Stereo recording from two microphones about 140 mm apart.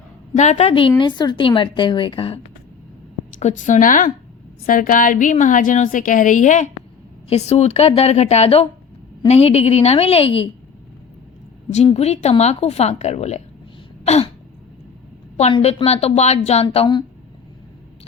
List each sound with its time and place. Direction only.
0.5 s a woman's voice: 40° left (ahead or behind)
3.3 s a woman's voice: 65° left (ahead or behind)
7.3 s a woman's voice: 50° left (ahead or behind)
11.9 s a woman's voice: 50° left (ahead or behind)
14.0 s throat clearing: 50° left (ahead or behind)
15.4 s a woman's voice: 45° left (ahead or behind)